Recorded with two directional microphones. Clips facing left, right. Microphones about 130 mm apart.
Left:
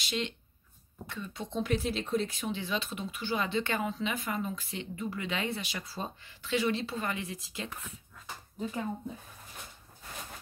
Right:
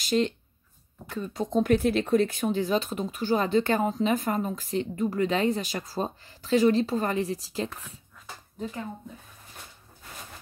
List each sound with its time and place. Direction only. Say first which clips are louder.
0.0 s speech: right 10 dB; 40° right (ahead or behind)